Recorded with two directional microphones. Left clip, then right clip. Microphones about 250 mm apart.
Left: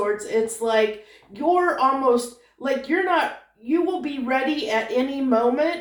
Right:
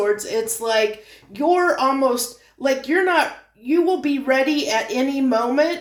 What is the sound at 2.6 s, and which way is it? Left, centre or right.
Speech, right.